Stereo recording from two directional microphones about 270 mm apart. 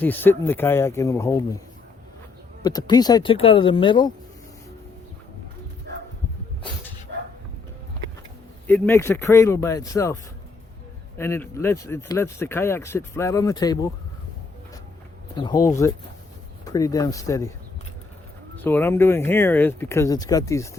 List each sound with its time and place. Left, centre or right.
0.0 s speech: centre
2.6 s speech: centre
7.1 s dog: right
8.6 s speech: centre
11.2 s speech: centre
15.4 s speech: centre
18.5 s speech: centre